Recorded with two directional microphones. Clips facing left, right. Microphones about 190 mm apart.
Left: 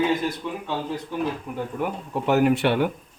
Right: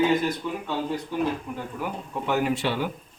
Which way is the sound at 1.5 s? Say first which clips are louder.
Left 3 dB; 5° left (ahead or behind).